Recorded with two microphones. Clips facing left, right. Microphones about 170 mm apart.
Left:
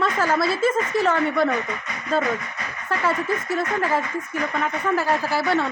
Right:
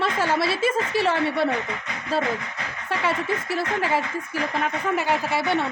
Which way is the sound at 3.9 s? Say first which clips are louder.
Left 1 dB; 30° right (ahead or behind).